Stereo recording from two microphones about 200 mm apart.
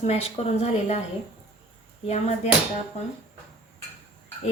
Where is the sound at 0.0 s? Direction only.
30° left (ahead or behind).